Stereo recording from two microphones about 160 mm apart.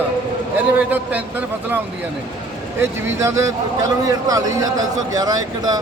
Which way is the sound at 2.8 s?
20° right (ahead or behind).